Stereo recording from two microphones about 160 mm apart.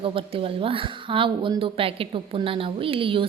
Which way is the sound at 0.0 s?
35° right (ahead or behind).